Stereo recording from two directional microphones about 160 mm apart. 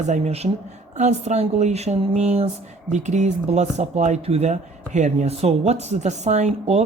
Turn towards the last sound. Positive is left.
turn(degrees=-45)  # may be behind; listen again after turning